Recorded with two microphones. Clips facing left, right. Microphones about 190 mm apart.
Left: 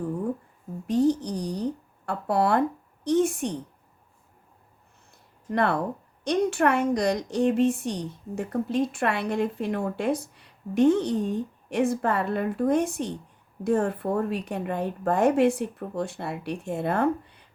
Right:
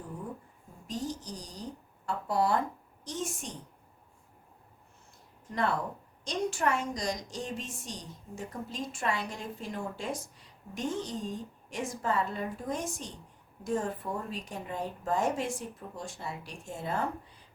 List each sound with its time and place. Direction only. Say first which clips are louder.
0.9 s speech: left 14 dB; 65° left (ahead or behind)
5.5 s a woman's voice: left 7 dB; 65° left (ahead or behind)